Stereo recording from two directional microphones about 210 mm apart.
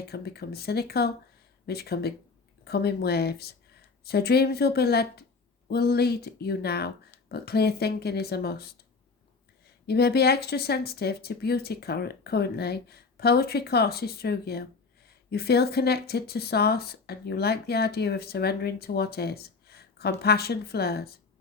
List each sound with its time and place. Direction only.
0.0 s speech: 50° left (ahead or behind)
9.8 s speech: 50° left (ahead or behind)